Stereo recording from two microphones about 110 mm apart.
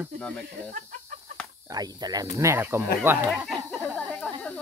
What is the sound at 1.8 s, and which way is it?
Speech, 35° right (ahead or behind).